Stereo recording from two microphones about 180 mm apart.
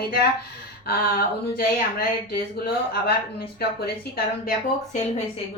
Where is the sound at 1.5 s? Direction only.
55° left (ahead or behind).